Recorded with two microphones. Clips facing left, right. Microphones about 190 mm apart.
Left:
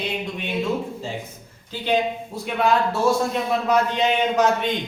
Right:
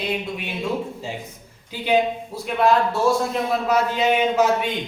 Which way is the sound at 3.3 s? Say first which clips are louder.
Even; 5° right (ahead or behind).